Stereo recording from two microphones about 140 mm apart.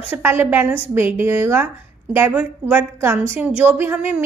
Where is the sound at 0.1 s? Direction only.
15° right (ahead or behind).